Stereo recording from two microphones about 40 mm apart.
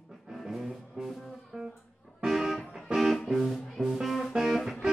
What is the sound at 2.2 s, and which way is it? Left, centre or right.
Music, centre.